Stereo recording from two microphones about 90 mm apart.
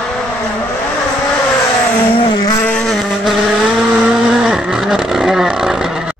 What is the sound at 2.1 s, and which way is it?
Vehicle, 75° left (ahead or behind).